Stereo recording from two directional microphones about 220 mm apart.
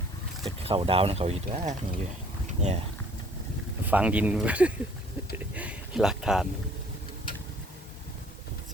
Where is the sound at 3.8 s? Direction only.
5° right (ahead or behind).